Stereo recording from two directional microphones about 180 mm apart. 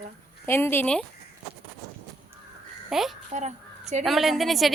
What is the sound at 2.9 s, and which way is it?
Speech, centre (ahead or behind).